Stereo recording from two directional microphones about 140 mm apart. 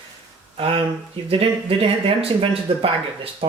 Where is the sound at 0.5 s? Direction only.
40° right (ahead or behind).